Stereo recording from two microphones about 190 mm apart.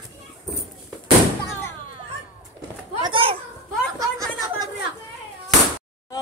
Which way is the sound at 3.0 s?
30° right (ahead or behind).